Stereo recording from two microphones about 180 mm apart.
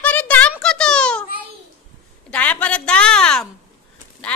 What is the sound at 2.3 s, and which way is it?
A woman's voice, 10° left (ahead or behind).